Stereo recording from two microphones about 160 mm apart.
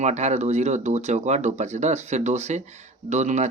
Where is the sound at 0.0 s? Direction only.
45° right (ahead or behind).